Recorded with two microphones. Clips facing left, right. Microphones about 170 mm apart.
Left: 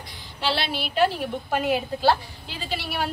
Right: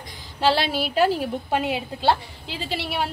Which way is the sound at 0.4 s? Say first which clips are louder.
Right 6 dB; 40° right (ahead or behind).